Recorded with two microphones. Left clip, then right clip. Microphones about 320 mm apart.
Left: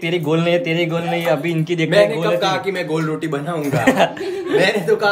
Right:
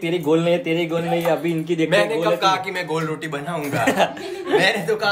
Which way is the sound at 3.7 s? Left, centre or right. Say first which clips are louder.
Left 3 dB; left.